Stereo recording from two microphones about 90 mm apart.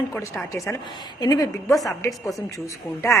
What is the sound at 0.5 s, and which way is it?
A woman's voice, 35° left (ahead or behind).